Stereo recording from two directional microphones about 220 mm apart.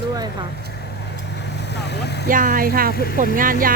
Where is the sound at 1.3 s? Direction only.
50° left (ahead or behind).